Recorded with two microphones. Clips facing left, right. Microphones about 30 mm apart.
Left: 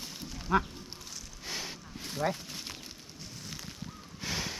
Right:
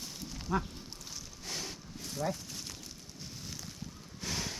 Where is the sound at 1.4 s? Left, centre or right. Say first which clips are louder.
Left 2 dB; centre.